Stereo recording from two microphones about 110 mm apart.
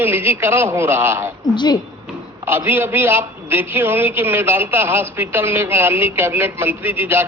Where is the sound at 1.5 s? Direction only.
40° left (ahead or behind).